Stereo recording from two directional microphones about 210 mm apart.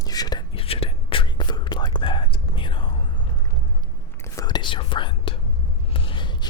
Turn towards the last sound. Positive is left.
turn(degrees=25)  # may be behind; listen again after turning